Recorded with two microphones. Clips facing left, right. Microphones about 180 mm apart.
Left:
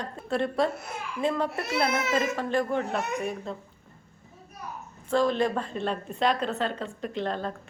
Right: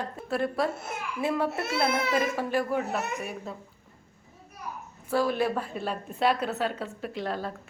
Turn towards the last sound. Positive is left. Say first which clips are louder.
# left 2 dB
turn(degrees=-10)  # may be behind; listen again after turning